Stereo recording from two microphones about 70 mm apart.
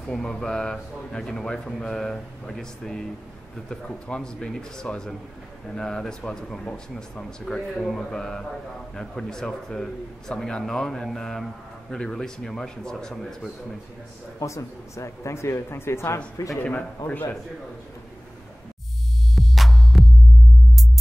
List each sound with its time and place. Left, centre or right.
0.1 s speech: centre
14.4 s speech: left
16.4 s speech: left
16.7 s speech: left
19.3 s music: centre